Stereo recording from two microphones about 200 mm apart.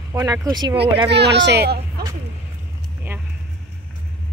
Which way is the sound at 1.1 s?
60° right (ahead or behind).